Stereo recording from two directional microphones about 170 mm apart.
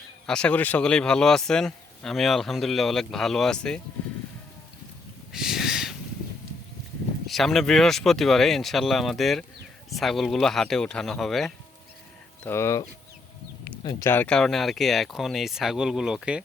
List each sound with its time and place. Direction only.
0.3 s speech: 5° left (ahead or behind)
5.3 s a sound: 5° right (ahead or behind)
7.3 s speech: centre (ahead or behind)
12.4 s speech: 15° left (ahead or behind)
13.8 s speech: 15° left (ahead or behind); by 16.4 s 5° right (ahead or behind)